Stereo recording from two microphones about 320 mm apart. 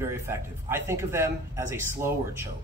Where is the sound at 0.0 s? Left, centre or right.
Centre.